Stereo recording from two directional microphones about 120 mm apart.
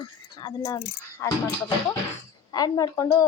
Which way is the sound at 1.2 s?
20° left (ahead or behind).